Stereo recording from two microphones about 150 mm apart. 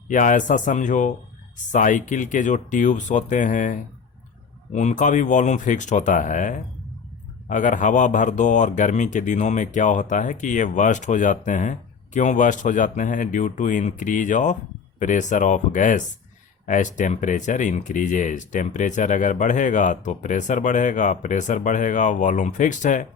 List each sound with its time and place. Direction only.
0.1 s speech: 60° left (ahead or behind)